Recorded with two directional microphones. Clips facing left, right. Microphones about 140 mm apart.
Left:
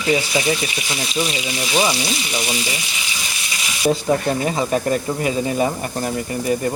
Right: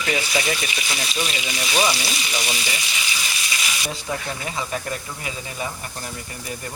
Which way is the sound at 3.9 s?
45° left (ahead or behind).